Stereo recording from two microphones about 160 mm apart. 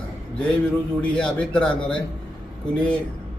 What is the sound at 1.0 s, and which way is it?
Speech, 5° left (ahead or behind).